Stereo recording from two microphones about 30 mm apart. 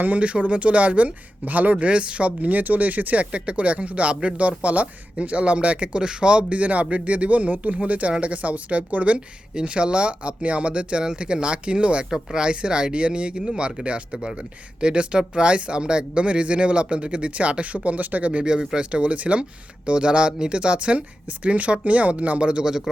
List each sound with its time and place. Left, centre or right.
0.2 s speech: right
1.5 s speech: right
2.4 s speech: right
3.3 s speech: right
6.0 s speech: right
6.6 s speech: right
9.6 s speech: right
12.1 s speech: right
18.8 s speech: right